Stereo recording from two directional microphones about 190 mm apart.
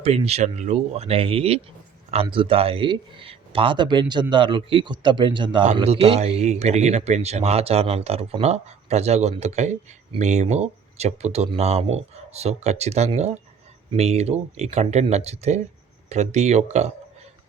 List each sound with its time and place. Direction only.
0.0 s speech: 35° right (ahead or behind)